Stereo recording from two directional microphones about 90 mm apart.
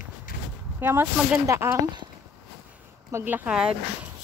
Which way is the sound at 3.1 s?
20° right (ahead or behind).